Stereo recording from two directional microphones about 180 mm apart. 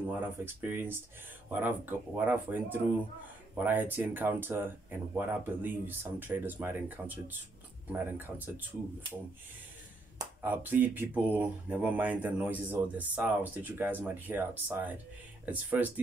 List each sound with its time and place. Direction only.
0.6 s speech: 10° right (ahead or behind)
10.4 s speech: 10° right (ahead or behind)